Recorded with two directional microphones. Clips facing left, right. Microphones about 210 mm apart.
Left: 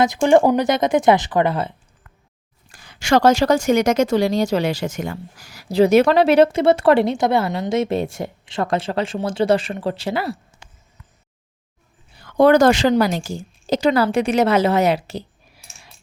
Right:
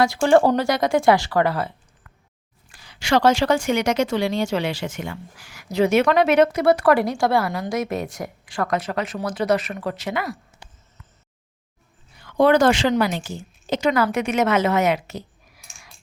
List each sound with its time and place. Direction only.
0.0 s speech: 20° left (ahead or behind)
2.6 s speech: 45° left (ahead or behind); by 10.4 s 30° left (ahead or behind)
12.1 s a woman's voice: 40° left (ahead or behind)